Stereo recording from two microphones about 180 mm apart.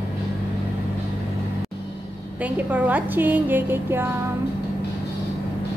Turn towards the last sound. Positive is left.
turn(degrees=-10)  # may be behind; listen again after turning